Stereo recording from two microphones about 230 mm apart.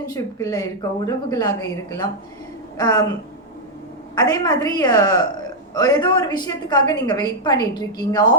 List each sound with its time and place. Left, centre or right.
0.0 s a woman's voice: centre
4.1 s a woman's voice: centre